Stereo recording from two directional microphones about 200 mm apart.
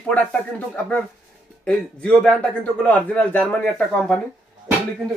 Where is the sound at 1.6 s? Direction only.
5° left (ahead or behind).